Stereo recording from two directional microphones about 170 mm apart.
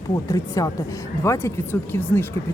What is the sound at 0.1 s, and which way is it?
Speech, 20° left (ahead or behind).